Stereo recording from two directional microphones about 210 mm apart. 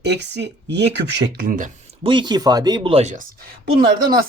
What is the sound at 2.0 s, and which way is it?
Speech, 20° right (ahead or behind).